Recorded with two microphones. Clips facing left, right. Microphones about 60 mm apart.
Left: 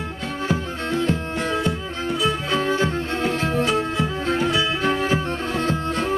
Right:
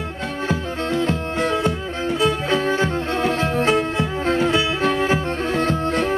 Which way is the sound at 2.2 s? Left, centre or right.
Right.